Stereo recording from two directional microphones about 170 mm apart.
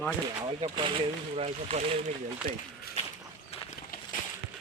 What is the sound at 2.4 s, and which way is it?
Speech, 55° right (ahead or behind).